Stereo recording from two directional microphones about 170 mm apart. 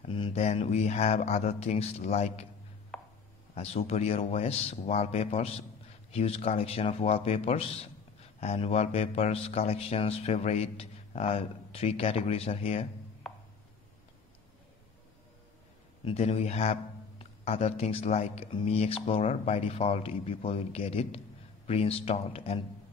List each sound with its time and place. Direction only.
0.0 s speech: 35° left (ahead or behind)
2.9 s chopping: centre (ahead or behind)
3.5 s speech: 35° left (ahead or behind)
13.2 s a sound: centre (ahead or behind)
16.1 s speech: 35° left (ahead or behind)